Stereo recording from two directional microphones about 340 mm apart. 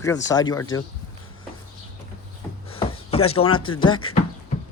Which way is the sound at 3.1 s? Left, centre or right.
Centre.